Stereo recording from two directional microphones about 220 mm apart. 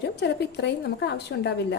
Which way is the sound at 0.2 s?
50° left (ahead or behind).